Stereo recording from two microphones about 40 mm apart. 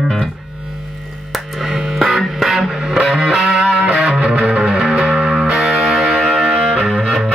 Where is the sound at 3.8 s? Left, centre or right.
Right.